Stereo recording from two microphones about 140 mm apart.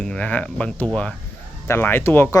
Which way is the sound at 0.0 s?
10° left (ahead or behind).